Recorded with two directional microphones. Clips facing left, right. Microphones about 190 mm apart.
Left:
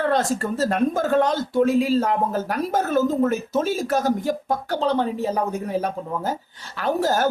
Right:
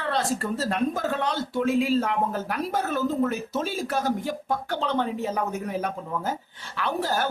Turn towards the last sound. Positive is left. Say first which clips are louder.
# left 5 dB
turn(degrees=45)  # may be behind; listen again after turning